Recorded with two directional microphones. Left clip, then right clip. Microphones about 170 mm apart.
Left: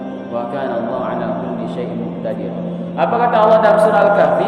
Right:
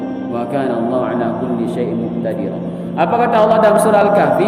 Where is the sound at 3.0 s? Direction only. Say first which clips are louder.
Even; 50° right (ahead or behind).